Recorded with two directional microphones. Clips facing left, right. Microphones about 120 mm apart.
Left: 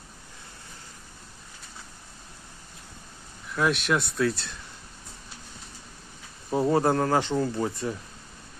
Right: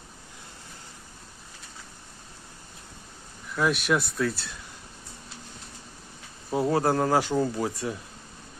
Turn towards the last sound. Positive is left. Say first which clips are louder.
# even
turn(degrees=-5)  # may be behind; listen again after turning